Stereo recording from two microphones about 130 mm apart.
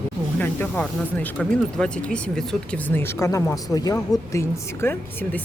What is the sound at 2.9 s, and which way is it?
Speech, 20° left (ahead or behind).